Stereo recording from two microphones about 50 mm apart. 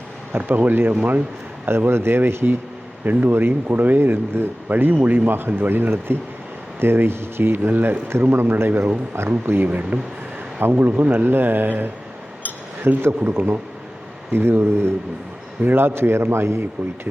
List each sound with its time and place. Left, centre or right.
0.3 s speech: right
1.6 s a man's voice: right
3.0 s a man's voice: right
8.3 s a man's voice: right
9.6 s a man's voice: right